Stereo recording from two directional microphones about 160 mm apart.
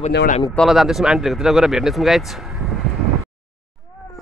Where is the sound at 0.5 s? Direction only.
Centre (ahead or behind).